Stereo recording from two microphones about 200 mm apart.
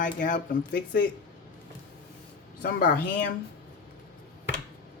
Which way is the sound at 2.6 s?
40° left (ahead or behind).